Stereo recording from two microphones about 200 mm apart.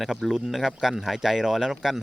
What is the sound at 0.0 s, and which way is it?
Speech, centre (ahead or behind).